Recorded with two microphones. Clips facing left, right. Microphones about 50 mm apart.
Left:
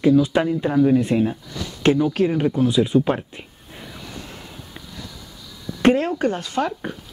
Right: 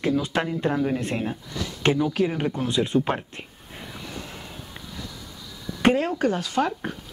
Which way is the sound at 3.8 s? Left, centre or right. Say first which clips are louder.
Even; centre.